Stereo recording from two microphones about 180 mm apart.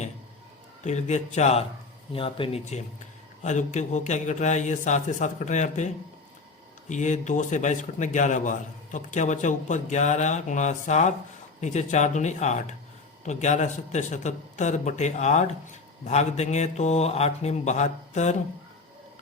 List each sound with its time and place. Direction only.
0.9 s speech: 40° left (ahead or behind)